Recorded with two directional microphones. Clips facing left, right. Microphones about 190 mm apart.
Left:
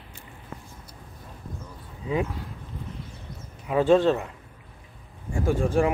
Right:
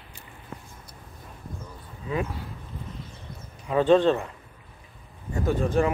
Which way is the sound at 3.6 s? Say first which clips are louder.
Even; 5° left (ahead or behind).